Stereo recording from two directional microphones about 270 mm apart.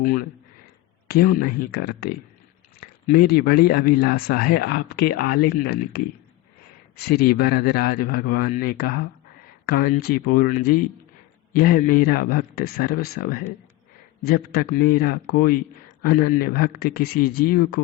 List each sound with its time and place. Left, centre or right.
0.0 s a man's voice: left